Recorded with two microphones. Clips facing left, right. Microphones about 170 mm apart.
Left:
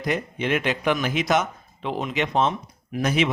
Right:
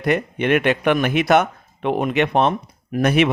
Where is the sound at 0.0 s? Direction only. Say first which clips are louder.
Right 6 dB; 60° right (ahead or behind).